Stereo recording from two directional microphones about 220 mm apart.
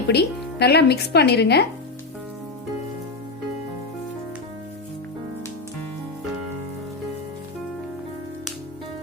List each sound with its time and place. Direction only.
0.1 s a woman's voice: 50° left (ahead or behind)